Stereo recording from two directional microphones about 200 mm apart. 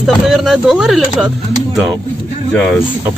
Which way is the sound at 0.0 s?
Centre (ahead or behind).